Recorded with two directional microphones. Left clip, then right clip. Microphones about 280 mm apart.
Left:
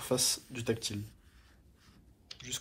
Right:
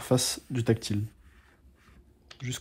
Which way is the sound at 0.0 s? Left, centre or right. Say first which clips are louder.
Right 4 dB; right.